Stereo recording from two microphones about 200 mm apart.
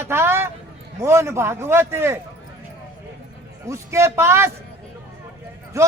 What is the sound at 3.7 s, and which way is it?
Speech, 15° right (ahead or behind).